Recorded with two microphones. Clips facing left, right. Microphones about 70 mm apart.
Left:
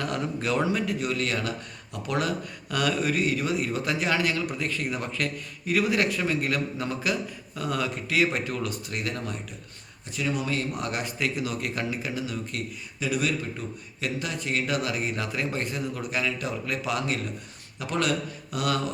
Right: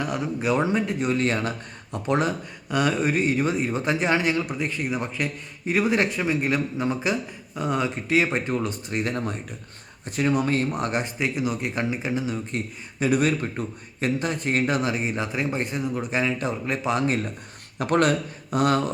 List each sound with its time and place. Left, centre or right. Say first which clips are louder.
0.0 s a man's voice: right 3 dB; centre; by 9.3 s right
10.1 s a man's voice: right 6 dB; right
13.0 s a man's voice: right 6 dB; right
17.7 s speech: right 6 dB; right